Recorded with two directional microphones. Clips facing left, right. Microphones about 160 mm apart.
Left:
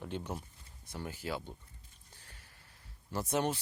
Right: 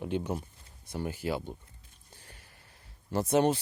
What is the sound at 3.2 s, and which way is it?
Speech, 25° right (ahead or behind).